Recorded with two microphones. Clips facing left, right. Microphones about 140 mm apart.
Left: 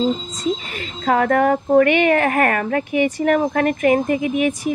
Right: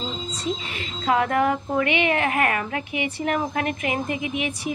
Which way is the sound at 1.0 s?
45° left (ahead or behind).